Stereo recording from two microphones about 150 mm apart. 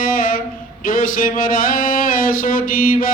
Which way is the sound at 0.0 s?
70° left (ahead or behind).